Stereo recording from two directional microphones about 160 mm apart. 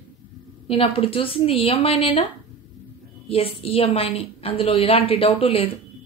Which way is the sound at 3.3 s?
35° left (ahead or behind).